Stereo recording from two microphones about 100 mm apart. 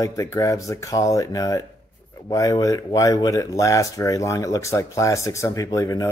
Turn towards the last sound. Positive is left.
turn(degrees=35)  # may be behind; listen again after turning